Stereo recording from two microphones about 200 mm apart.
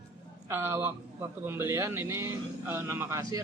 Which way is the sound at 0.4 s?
10° right (ahead or behind).